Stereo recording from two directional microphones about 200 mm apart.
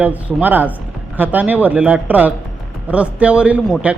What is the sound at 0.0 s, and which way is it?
A man's voice, 5° right (ahead or behind).